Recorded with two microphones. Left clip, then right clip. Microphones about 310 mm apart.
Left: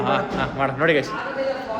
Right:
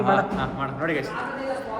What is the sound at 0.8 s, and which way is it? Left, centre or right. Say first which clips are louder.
Speech: left 8 dB; left.